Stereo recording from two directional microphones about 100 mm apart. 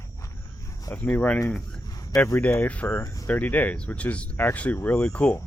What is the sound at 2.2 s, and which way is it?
Speech, 20° left (ahead or behind).